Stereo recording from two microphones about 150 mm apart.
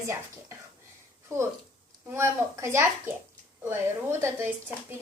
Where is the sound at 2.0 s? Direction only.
15° right (ahead or behind).